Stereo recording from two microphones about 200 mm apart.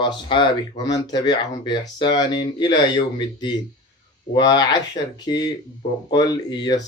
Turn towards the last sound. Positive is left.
turn(degrees=20)  # may be behind; listen again after turning